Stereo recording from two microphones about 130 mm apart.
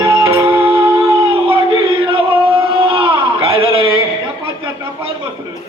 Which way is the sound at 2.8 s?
40° right (ahead or behind).